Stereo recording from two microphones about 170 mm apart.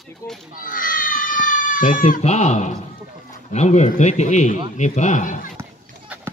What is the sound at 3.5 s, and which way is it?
Speech, 45° left (ahead or behind).